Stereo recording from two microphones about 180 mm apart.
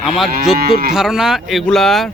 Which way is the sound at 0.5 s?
60° right (ahead or behind).